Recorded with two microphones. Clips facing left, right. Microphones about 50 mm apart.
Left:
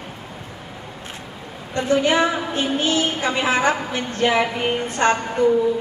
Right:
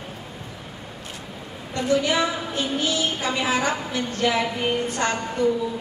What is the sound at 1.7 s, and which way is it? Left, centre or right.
A woman's voice, left.